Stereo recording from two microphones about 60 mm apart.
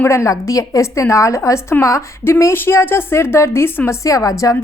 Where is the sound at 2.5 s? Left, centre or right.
Left.